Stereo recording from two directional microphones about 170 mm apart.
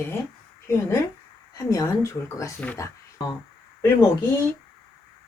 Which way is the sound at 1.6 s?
20° left (ahead or behind).